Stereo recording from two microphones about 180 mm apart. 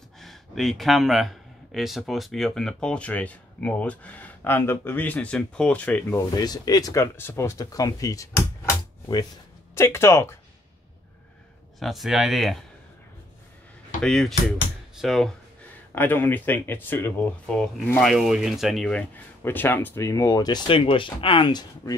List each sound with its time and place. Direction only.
0.2 s a man's voice: centre (ahead or behind)
6.3 s speech: 20° left (ahead or behind)
9.8 s speech: 15° left (ahead or behind)
11.8 s a man's voice: centre (ahead or behind)
14.0 s a man's voice: 5° left (ahead or behind)
15.9 s speech: 10° left (ahead or behind)